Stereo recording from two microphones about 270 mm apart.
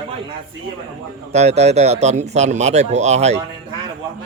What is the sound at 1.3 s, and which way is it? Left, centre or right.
Speech, right.